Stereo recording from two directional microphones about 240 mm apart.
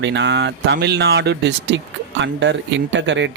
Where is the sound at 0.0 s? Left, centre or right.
Right.